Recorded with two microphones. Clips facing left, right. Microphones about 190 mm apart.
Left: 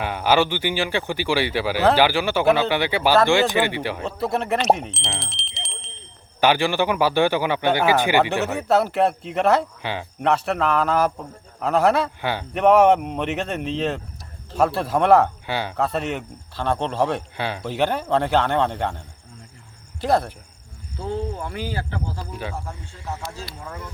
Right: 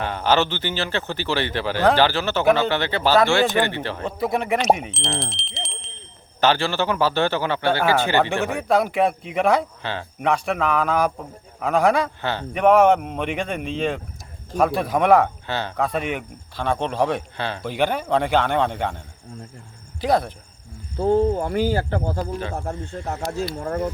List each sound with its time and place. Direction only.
0.0 s speech: 10° left (ahead or behind)
4.2 s speech: centre (ahead or behind)
6.4 s speech: 15° left (ahead or behind)
9.8 s speech: 10° left (ahead or behind)
10.6 s speech: centre (ahead or behind)
12.5 s speech: 5° right (ahead or behind)
15.4 s speech: 10° left (ahead or behind)
15.9 s speech: 10° right (ahead or behind)
17.3 s speech: 10° left (ahead or behind)
17.6 s speech: centre (ahead or behind)
21.0 s speech: 50° right (ahead or behind)
23.0 s speech: 65° right (ahead or behind)
23.6 s speech: 45° right (ahead or behind)